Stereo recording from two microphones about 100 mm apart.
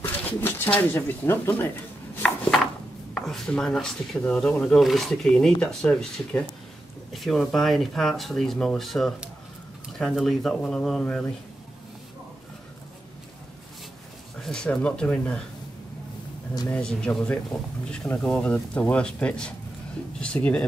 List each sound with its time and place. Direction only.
0.0 s speech: 20° left (ahead or behind)
3.2 s speech: 5° left (ahead or behind)
10.1 s speech: centre (ahead or behind)
14.4 s speech: 5° left (ahead or behind)
16.7 s speech: 10° left (ahead or behind)